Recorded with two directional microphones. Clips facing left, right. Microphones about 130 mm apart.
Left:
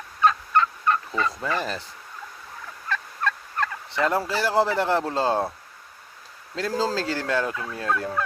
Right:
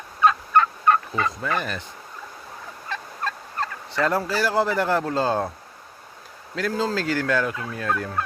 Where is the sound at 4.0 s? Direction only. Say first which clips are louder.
Right 1 dB; 20° left (ahead or behind).